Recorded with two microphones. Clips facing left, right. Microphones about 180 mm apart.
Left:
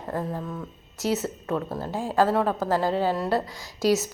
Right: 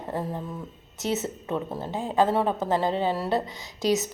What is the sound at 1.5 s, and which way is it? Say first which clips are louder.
A woman's voice: left 1 dB; 20° right (ahead or behind).